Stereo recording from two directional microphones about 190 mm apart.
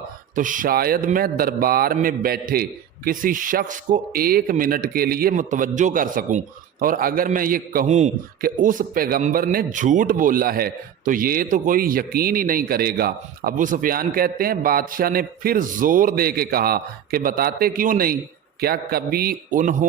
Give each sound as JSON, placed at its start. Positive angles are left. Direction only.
{"t": 0.3, "sound": "a man's voice", "side_deg": -45}